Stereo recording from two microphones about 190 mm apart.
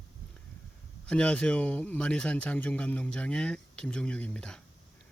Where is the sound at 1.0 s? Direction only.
5° left (ahead or behind).